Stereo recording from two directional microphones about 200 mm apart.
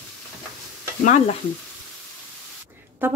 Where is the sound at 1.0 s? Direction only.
35° left (ahead or behind).